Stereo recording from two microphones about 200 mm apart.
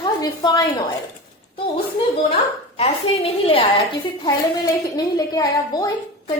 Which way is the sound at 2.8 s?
30° left (ahead or behind).